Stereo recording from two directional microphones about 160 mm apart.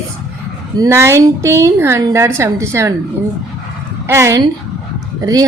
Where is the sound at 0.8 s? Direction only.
15° right (ahead or behind).